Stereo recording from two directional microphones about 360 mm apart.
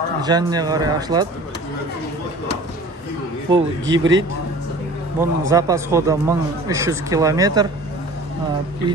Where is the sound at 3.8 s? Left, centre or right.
Right.